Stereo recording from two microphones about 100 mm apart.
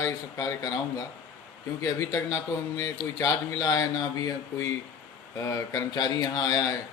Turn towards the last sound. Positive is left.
turn(degrees=35)  # may be behind; listen again after turning